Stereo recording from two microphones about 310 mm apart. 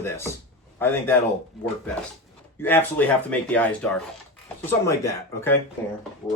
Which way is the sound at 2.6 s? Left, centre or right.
Centre.